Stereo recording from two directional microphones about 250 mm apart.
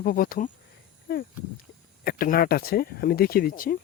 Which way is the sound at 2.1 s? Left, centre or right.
Left.